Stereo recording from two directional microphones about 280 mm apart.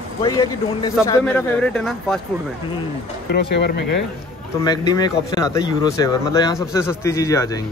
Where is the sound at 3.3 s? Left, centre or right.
Left.